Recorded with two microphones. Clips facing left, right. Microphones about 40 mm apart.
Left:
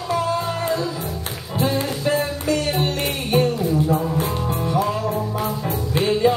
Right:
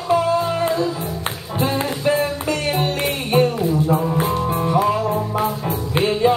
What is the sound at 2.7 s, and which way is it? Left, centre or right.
Music, centre.